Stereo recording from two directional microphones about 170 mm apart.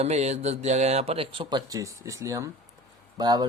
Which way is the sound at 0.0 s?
40° right (ahead or behind).